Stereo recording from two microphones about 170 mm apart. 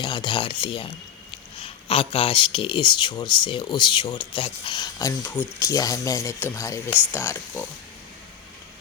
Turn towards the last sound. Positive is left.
turn(degrees=15)  # may be behind; listen again after turning